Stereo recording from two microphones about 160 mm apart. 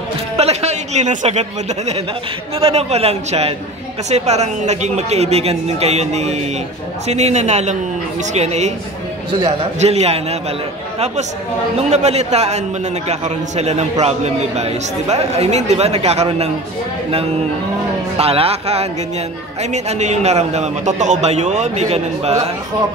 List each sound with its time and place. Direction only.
0.4 s a sound: 40° right (ahead or behind)
2.6 s a man's voice: 40° right (ahead or behind)
9.8 s speech: 40° right (ahead or behind)
11.7 s a man's voice: 40° right (ahead or behind)
18.1 s a man's voice: 40° right (ahead or behind)